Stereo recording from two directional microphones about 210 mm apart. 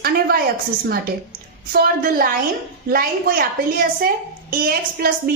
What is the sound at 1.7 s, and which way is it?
A woman's voice, 45° right (ahead or behind).